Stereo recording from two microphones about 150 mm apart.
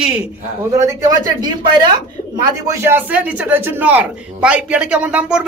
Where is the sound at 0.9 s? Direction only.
25° right (ahead or behind); by 5.4 s 5° right (ahead or behind).